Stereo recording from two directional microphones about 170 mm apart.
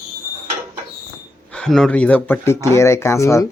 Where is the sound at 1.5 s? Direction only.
5° left (ahead or behind).